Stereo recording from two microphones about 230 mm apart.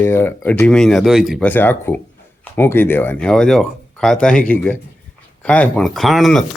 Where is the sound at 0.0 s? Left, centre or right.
Centre.